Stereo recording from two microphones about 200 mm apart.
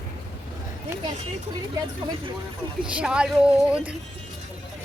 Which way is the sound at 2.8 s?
5° right (ahead or behind).